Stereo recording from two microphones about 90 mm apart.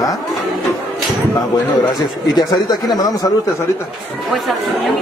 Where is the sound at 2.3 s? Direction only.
50° left (ahead or behind).